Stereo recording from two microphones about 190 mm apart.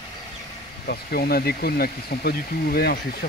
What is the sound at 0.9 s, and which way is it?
Speech, 55° left (ahead or behind).